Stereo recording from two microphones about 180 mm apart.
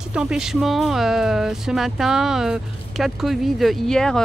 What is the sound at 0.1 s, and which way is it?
Speech, 5° right (ahead or behind).